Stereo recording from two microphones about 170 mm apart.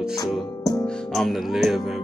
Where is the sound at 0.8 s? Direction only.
Centre (ahead or behind).